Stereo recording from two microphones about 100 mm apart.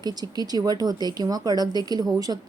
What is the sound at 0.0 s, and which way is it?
A woman's voice, 40° right (ahead or behind).